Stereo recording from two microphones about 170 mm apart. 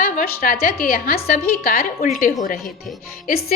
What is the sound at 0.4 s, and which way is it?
A woman's voice, 65° left (ahead or behind).